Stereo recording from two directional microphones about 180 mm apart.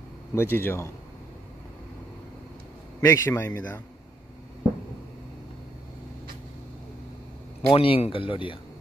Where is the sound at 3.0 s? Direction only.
20° left (ahead or behind).